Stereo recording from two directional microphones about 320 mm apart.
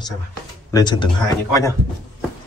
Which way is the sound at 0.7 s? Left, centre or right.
Centre.